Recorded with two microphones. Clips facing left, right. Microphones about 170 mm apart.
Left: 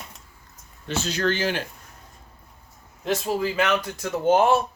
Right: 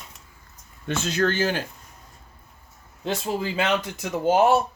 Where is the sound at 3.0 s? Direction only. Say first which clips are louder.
Left 2 dB; 25° right (ahead or behind).